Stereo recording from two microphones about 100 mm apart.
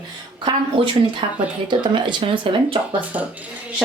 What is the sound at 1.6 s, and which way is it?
Speech, 50° right (ahead or behind).